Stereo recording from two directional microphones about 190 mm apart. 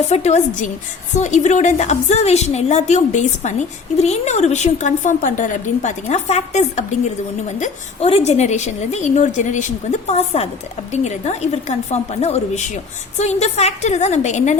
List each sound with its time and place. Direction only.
0.1 s a woman's voice: 35° left (ahead or behind)